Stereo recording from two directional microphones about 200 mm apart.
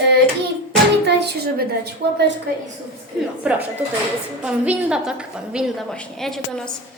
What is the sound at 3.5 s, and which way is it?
Speech, 5° right (ahead or behind).